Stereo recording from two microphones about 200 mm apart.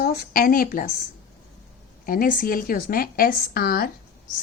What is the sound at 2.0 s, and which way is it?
Speech, 45° left (ahead or behind).